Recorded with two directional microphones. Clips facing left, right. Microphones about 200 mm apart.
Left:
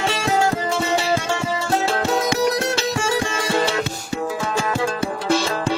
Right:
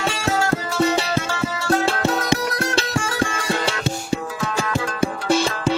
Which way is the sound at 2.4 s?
25° left (ahead or behind).